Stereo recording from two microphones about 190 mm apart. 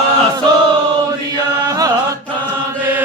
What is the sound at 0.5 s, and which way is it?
Choir, 20° right (ahead or behind).